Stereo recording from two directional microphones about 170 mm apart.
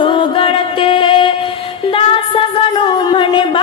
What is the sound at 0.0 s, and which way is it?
Music, 30° left (ahead or behind).